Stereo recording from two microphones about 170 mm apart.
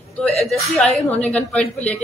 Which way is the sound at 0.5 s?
Centre (ahead or behind).